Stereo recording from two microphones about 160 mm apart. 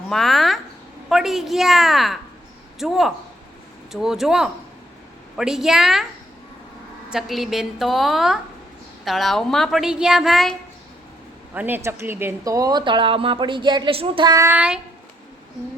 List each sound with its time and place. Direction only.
0.1 s a woman's voice: centre (ahead or behind)
7.1 s a woman's voice: centre (ahead or behind)
11.5 s speech: 10° right (ahead or behind)
14.5 s a sound: 10° right (ahead or behind)